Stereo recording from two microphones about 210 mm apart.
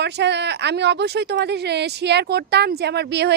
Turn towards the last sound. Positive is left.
turn(degrees=-55)  # may be behind; listen again after turning